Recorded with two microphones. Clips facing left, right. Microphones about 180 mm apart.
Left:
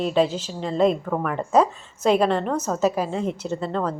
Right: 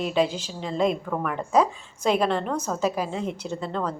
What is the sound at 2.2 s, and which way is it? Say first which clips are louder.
Speech: left 3 dB; 5° left (ahead or behind).